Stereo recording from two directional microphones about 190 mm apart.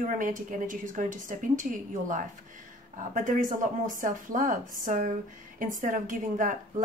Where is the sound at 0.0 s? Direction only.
45° right (ahead or behind).